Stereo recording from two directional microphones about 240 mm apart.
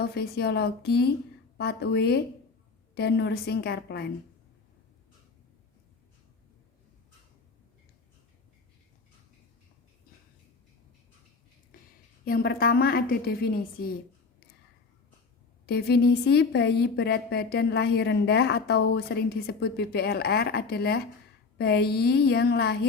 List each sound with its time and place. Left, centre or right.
0.0 s a woman's voice: left
11.7 s a sound: left
12.2 s a woman's voice: left
15.6 s a woman's voice: left